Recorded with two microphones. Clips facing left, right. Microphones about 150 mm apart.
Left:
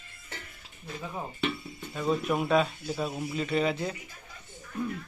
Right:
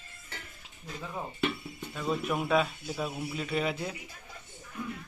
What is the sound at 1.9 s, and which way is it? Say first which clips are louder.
Speech: left 3 dB; centre (ahead or behind).